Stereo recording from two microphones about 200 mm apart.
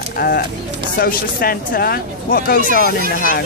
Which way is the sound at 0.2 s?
50° left (ahead or behind).